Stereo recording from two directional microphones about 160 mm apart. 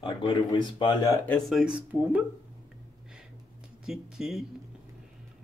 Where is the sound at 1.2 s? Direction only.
10° left (ahead or behind).